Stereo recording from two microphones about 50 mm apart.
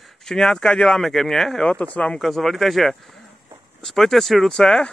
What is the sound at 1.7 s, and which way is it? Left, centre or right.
Speech, left.